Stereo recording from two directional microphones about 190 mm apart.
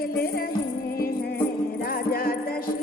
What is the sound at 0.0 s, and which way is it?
Music, 50° left (ahead or behind).